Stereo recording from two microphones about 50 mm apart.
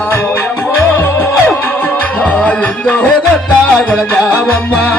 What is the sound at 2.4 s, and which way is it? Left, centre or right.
Music, centre.